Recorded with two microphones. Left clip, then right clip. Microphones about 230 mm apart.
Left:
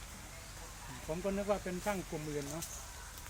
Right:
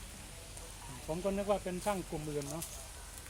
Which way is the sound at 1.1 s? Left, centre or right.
Right.